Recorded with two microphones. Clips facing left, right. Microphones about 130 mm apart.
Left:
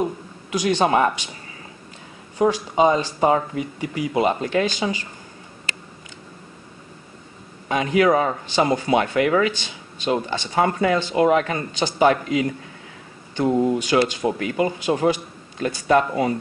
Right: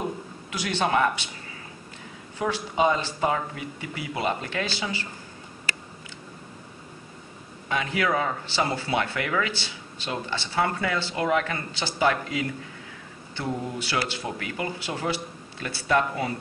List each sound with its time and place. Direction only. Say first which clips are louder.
0.5 s speech: left 8 dB; 15° left (ahead or behind)
0.8 s speech: left 3 dB; 25° left (ahead or behind)
2.4 s speech: left 6 dB; 25° left (ahead or behind)
7.6 s a man's voice: left 8 dB; 20° left (ahead or behind)